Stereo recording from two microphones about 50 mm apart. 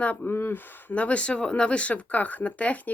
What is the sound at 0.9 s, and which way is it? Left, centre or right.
A woman's voice, left.